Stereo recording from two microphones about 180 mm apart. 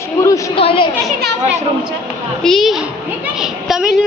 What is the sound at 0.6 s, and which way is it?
Speech, 30° left (ahead or behind).